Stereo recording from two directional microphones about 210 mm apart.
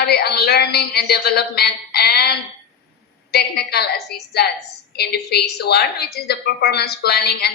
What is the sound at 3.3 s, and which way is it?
A woman's voice, 50° left (ahead or behind).